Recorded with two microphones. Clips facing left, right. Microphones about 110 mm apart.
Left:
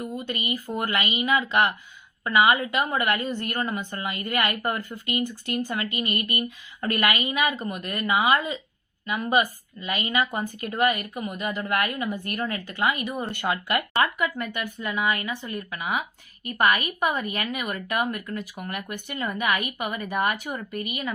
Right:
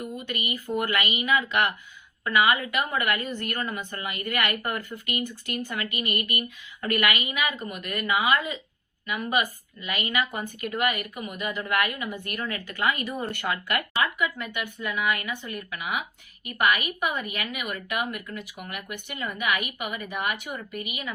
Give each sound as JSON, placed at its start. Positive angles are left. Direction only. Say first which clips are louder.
{"t": 0.0, "sound": "a woman's voice", "louder": "left 2 dB", "side_deg": 30}
{"t": 14.0, "sound": "speech", "louder": "left 2 dB", "side_deg": 45}